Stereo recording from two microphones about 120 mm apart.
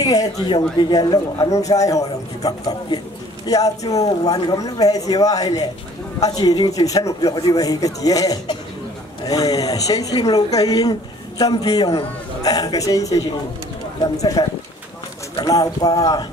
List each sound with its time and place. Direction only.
0.0 s speech: 30° left (ahead or behind)